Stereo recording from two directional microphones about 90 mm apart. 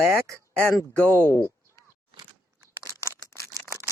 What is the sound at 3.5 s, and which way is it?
Camera, 35° right (ahead or behind).